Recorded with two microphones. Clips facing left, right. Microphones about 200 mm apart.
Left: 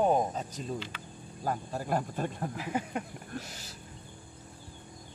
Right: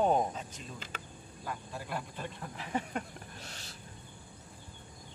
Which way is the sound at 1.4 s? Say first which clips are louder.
Left 8 dB; 45° left (ahead or behind).